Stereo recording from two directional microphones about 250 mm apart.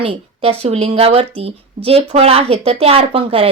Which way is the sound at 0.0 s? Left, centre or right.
Right.